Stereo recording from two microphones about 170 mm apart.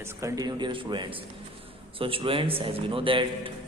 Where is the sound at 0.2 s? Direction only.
20° right (ahead or behind).